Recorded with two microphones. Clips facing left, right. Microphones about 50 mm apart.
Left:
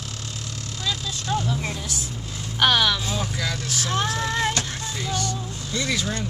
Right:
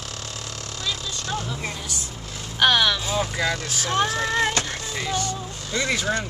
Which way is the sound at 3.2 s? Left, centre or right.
Right.